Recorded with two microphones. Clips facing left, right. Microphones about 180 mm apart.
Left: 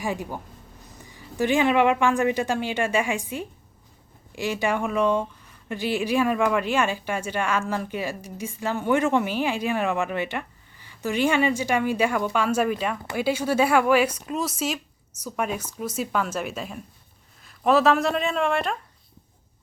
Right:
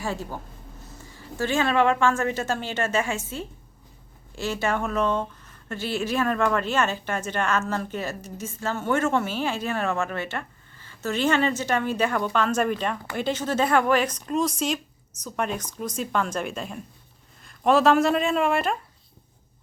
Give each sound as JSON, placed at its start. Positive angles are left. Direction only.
{"t": 0.0, "sound": "a woman's voice", "side_deg": 15}